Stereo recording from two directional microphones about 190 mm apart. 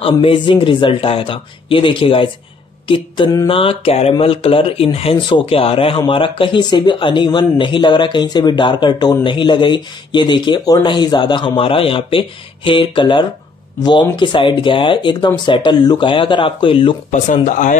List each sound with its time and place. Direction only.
0.0 s speech: 30° left (ahead or behind)
17.1 s speech: 40° left (ahead or behind)